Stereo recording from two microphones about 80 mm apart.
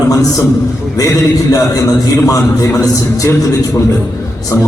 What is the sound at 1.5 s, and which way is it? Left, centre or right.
A man's voice, left.